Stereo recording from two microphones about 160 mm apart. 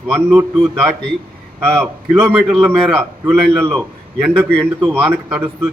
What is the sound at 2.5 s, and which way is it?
A man's voice, centre (ahead or behind).